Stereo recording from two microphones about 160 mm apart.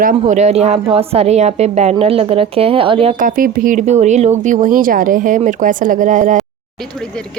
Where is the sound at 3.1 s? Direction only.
60° right (ahead or behind).